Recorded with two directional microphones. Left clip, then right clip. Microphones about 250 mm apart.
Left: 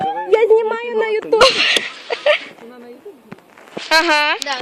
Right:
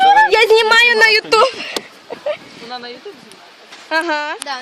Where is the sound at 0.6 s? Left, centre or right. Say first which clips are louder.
Right 9 dB; right.